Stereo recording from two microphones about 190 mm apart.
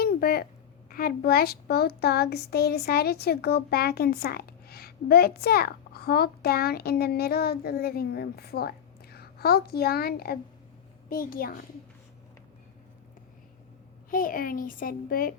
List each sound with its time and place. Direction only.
0.0 s a sound: 50° left (ahead or behind)
0.9 s a child's voice: 50° left (ahead or behind)
14.1 s a child's voice: 50° left (ahead or behind)